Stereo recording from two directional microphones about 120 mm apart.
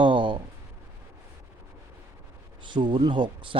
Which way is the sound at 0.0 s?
45° right (ahead or behind).